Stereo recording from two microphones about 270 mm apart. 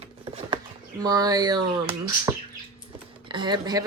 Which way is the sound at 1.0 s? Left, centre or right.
Centre.